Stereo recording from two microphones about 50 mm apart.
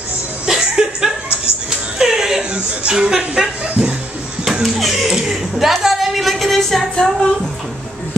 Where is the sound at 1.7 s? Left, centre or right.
Centre.